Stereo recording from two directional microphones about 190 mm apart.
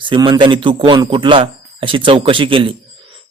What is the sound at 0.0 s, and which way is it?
A man's voice, 25° right (ahead or behind).